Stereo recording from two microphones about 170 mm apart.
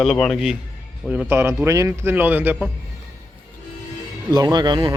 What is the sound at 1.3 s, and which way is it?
Speech, 15° right (ahead or behind).